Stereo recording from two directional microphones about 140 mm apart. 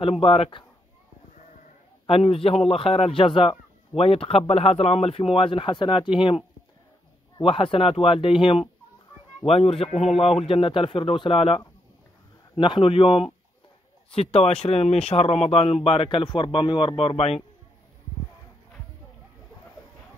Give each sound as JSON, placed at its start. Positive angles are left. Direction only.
{"t": 0.0, "sound": "a man's voice", "side_deg": 40}
{"t": 2.0, "sound": "a man's voice", "side_deg": 45}
{"t": 7.4, "sound": "a man's voice", "side_deg": 40}